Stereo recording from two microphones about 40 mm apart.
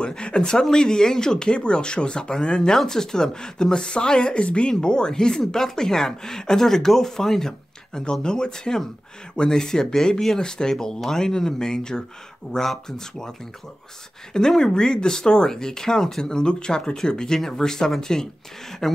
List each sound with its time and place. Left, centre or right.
0.0 s speech: left
14.3 s speech: centre